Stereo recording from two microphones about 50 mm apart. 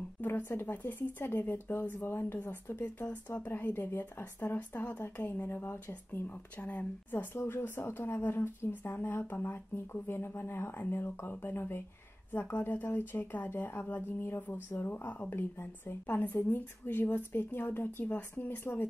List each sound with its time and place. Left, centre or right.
0.2 s a sound: left
0.5 s speech: left
2.3 s speech: left
5.5 s speech: left
6.2 s speech: left
7.3 s speech: left